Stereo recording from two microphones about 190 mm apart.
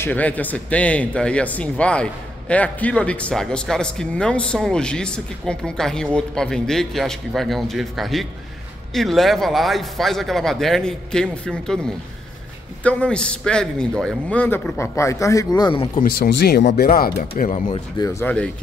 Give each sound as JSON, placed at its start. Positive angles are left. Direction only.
{"t": 0.0, "sound": "a man's voice", "side_deg": 10}
{"t": 16.0, "sound": "speech", "side_deg": 55}
{"t": 18.2, "sound": "speech", "side_deg": 5}